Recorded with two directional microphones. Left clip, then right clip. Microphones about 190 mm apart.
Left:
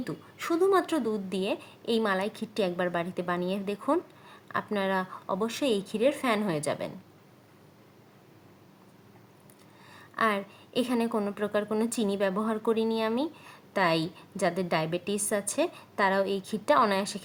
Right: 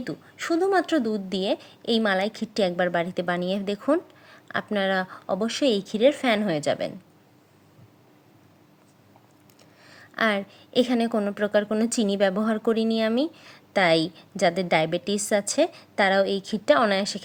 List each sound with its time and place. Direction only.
0.3 s speech: 25° right (ahead or behind)
9.8 s a woman's voice: 25° right (ahead or behind)